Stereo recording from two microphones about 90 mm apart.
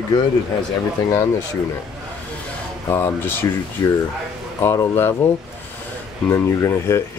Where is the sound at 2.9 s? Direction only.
25° left (ahead or behind).